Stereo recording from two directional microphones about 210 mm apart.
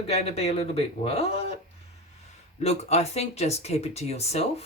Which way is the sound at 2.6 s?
30° left (ahead or behind).